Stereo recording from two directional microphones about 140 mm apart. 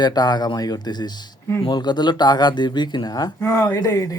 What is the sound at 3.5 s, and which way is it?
Speech, 15° left (ahead or behind).